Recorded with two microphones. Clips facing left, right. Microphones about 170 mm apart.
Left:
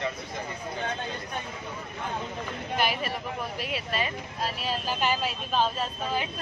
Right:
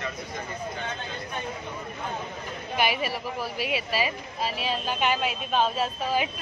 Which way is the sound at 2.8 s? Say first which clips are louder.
Right 2 dB; 5° right (ahead or behind).